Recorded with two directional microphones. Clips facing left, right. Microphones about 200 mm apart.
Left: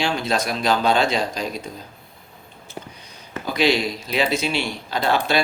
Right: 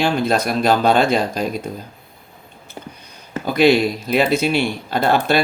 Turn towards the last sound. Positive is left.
turn(degrees=-55)  # may be behind; listen again after turning